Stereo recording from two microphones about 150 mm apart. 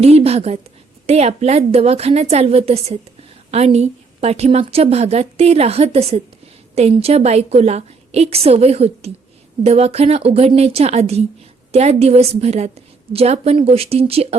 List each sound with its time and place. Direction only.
0.0 s a woman's voice: 45° right (ahead or behind)